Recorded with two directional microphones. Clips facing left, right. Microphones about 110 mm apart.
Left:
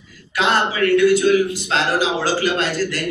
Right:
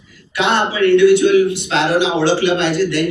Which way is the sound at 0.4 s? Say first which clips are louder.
Right 3 dB; 40° left (ahead or behind).